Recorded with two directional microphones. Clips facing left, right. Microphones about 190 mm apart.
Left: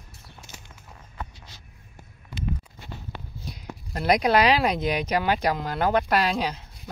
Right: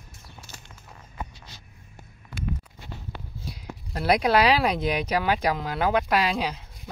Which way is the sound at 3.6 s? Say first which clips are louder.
Even; 5° right (ahead or behind).